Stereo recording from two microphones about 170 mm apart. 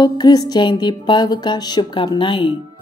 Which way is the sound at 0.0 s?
25° left (ahead or behind).